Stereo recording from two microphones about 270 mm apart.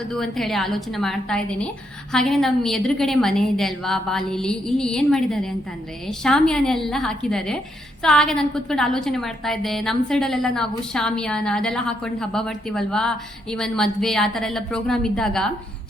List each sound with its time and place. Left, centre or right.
0.1 s a woman's voice: centre